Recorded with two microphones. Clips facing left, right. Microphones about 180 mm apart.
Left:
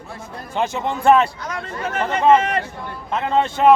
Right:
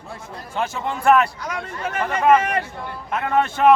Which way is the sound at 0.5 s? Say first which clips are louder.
Left 3 dB; 25° left (ahead or behind).